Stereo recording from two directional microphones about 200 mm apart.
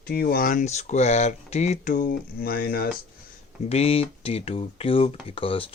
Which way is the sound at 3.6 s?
30° left (ahead or behind).